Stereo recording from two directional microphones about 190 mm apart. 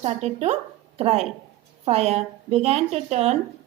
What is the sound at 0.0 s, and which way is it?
A woman's voice, 35° right (ahead or behind).